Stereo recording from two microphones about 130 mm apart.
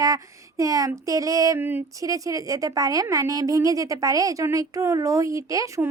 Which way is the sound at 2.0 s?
25° right (ahead or behind).